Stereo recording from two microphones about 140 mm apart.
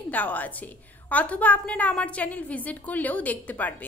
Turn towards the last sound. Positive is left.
turn(degrees=10)  # may be behind; listen again after turning